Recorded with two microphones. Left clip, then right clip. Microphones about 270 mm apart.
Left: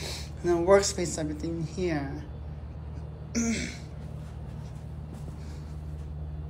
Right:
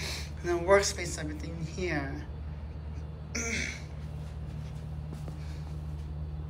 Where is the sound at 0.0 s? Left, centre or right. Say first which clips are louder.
Left 4 dB; centre.